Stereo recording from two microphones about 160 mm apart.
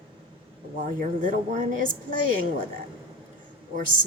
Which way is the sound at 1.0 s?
55° right (ahead or behind).